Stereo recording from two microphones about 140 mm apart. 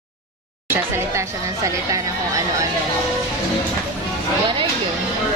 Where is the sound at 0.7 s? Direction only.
20° right (ahead or behind).